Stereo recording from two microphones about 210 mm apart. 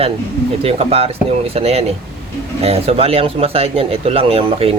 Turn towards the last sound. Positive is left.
turn(degrees=-25)  # may be behind; listen again after turning